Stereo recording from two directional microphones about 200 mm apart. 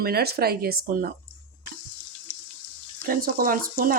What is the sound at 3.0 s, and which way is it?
Speech, 45° right (ahead or behind).